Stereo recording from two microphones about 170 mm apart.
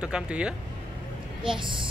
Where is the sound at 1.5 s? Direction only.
30° right (ahead or behind).